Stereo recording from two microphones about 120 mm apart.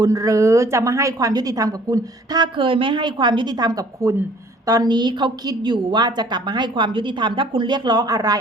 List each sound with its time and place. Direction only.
0.0 s a woman's voice: 30° right (ahead or behind)